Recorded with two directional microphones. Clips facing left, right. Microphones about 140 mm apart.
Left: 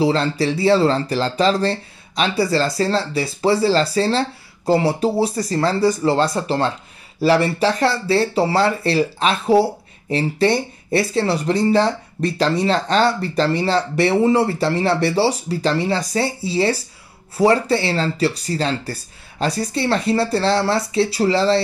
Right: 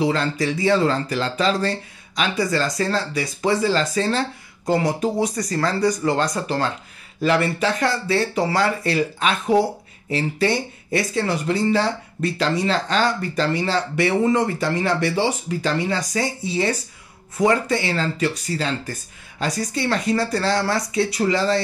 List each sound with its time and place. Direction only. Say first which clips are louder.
0.0 s speech: left 3 dB; 30° left (ahead or behind)